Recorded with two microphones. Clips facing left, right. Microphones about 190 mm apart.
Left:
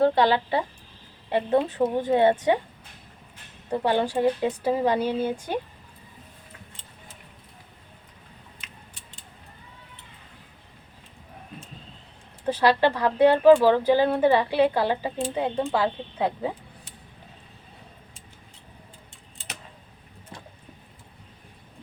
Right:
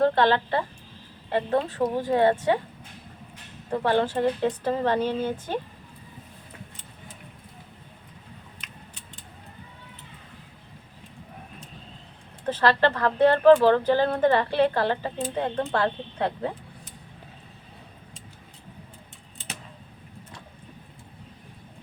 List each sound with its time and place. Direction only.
0.0 s a woman's voice: 10° left (ahead or behind)
3.7 s speech: 15° left (ahead or behind)
12.5 s speech: 10° left (ahead or behind)